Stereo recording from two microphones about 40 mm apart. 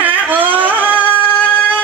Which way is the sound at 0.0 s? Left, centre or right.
Right.